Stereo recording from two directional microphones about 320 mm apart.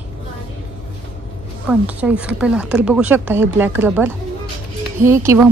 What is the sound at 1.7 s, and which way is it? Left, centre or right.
A woman's voice, centre.